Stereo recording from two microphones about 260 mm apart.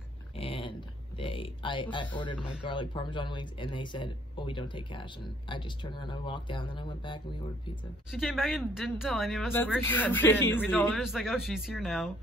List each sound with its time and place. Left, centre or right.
0.4 s a sound: left
1.2 s speech: centre
8.1 s a man's voice: centre